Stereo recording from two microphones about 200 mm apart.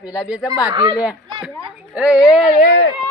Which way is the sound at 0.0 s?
20° left (ahead or behind).